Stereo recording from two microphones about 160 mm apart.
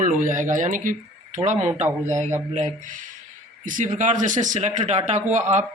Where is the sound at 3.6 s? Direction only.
55° right (ahead or behind).